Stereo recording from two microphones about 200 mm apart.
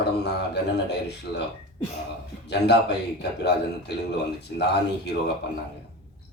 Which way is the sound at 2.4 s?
60° left (ahead or behind).